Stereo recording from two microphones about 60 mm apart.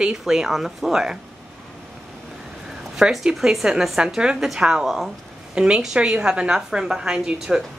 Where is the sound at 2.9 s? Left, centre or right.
Centre.